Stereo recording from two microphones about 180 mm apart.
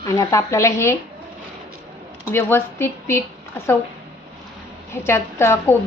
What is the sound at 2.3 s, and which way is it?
Speech, 10° left (ahead or behind).